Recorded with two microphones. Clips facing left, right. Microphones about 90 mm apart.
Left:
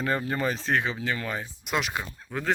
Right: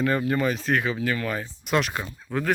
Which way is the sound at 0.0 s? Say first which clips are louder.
Right 4 dB; 30° left (ahead or behind).